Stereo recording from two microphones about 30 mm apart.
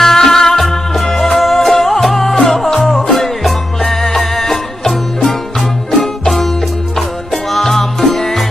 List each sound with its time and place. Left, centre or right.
0.0 s music: centre
7.5 s music: centre